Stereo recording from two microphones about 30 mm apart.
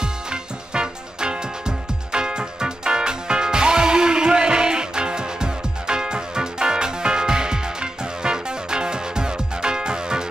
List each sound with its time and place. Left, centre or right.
0.0 s music: right